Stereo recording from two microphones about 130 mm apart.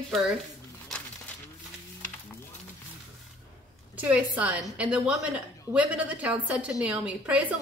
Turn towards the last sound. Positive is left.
turn(degrees=-10)  # may be behind; listen again after turning